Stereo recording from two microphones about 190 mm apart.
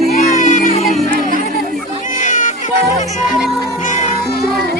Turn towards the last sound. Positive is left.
turn(degrees=40)  # may be behind; listen again after turning